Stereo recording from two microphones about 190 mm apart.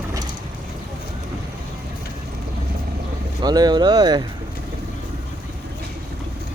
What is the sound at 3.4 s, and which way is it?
Speech, 20° right (ahead or behind).